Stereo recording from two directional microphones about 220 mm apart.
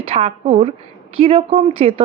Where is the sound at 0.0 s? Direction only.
25° right (ahead or behind).